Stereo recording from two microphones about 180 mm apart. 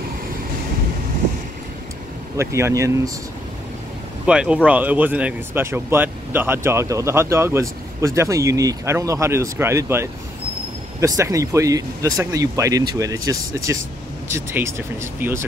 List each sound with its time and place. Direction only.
2.3 s speech: 15° right (ahead or behind)
4.3 s speech: 5° right (ahead or behind)